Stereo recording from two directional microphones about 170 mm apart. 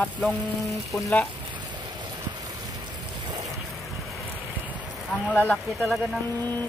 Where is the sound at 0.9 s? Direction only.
10° left (ahead or behind).